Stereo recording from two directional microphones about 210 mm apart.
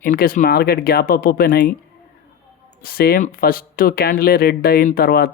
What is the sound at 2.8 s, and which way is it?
Speech, 45° left (ahead or behind).